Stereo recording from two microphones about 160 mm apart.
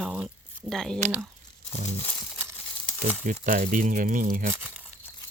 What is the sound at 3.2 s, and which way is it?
Speech, 55° right (ahead or behind).